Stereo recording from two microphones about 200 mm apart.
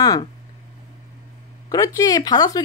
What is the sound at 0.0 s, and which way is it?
Speech, 20° left (ahead or behind).